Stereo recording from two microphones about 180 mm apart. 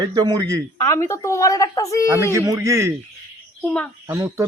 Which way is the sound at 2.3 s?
15° right (ahead or behind).